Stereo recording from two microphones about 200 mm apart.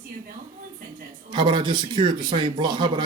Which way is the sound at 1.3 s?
25° right (ahead or behind).